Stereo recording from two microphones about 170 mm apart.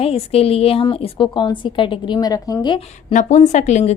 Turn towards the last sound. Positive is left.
turn(degrees=40)  # may be behind; listen again after turning